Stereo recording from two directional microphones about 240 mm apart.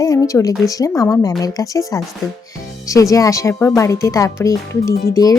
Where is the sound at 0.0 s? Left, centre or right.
Centre.